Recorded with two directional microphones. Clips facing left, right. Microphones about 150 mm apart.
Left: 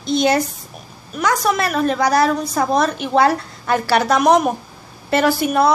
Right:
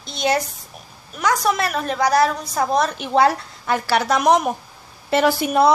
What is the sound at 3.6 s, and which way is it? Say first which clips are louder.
A woman's voice: left 3 dB; 10° right (ahead or behind).